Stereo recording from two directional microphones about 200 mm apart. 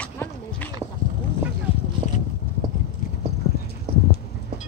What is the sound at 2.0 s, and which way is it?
Boat, 35° left (ahead or behind).